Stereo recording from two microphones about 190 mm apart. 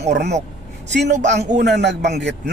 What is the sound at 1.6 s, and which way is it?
Speech, 65° right (ahead or behind).